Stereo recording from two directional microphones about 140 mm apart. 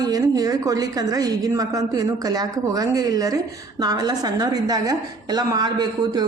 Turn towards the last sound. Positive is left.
turn(degrees=-30)  # may be behind; listen again after turning